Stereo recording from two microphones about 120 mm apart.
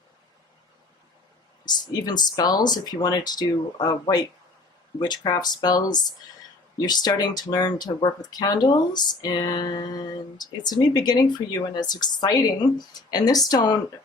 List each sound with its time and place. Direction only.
1.6 s speech: 35° left (ahead or behind)